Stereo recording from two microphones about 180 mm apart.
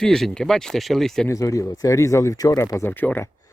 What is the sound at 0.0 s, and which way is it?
Speech, 5° left (ahead or behind).